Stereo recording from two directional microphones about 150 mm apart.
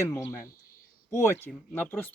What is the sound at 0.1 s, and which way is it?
Cricket, 20° left (ahead or behind).